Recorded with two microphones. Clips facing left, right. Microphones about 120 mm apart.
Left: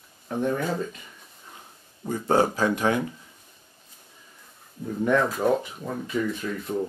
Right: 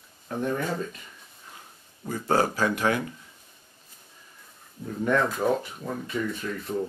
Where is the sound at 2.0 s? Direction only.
15° left (ahead or behind).